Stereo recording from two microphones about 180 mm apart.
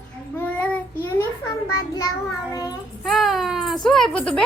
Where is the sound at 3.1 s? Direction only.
Centre (ahead or behind).